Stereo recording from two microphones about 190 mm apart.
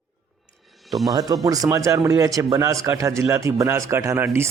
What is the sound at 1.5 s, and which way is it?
Speech, 20° right (ahead or behind).